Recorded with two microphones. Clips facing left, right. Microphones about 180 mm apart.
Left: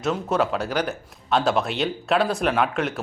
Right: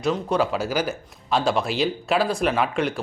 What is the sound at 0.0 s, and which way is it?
Speech, centre (ahead or behind).